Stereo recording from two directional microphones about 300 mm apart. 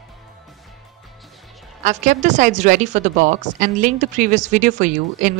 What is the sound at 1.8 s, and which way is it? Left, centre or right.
A woman's voice, right.